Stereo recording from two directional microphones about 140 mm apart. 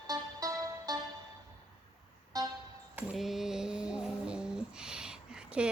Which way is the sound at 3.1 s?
Centre (ahead or behind).